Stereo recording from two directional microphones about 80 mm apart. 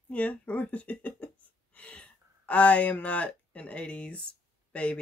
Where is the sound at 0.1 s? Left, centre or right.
Centre.